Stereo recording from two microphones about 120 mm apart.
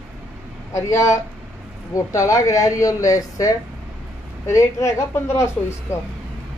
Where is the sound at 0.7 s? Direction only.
25° left (ahead or behind).